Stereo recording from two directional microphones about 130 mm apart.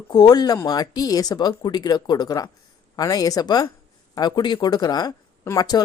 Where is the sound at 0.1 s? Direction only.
30° left (ahead or behind).